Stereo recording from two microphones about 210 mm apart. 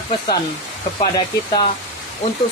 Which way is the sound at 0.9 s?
20° left (ahead or behind).